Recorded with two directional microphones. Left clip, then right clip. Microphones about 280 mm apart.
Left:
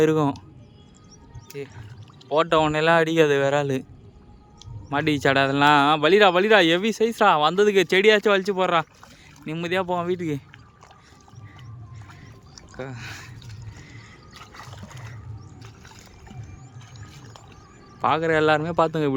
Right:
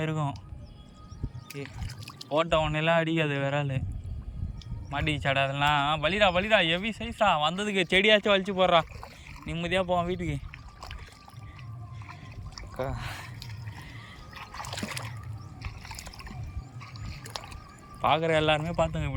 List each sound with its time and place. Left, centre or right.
0.0 s speech: centre
1.5 s speech: centre
4.9 s speech: centre
12.7 s gasp: centre
14.8 s a sound: right
18.0 s speech: centre